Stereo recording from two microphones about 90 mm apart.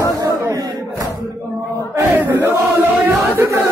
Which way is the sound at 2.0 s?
20° right (ahead or behind).